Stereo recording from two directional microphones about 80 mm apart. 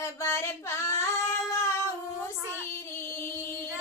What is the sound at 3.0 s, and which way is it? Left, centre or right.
Music, left.